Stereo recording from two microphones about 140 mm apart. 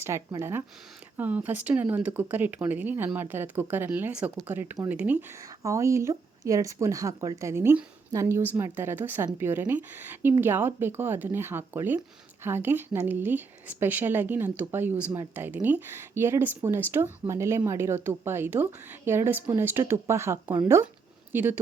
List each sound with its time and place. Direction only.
0.0 s speech: 20° right (ahead or behind)
5.6 s speech: 20° right (ahead or behind)